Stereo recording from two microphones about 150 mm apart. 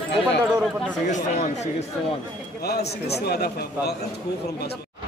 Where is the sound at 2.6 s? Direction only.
90° left.